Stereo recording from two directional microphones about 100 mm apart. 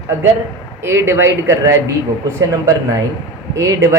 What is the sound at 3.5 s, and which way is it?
Speech, 30° right (ahead or behind).